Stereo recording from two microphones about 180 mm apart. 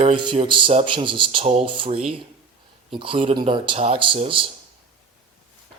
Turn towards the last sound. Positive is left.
turn(degrees=-30)  # may be behind; listen again after turning